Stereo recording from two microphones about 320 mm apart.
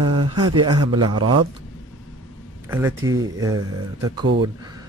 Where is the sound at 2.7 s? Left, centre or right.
Centre.